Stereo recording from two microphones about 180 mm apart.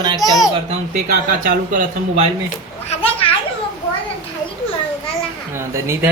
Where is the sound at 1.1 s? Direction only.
50° right (ahead or behind).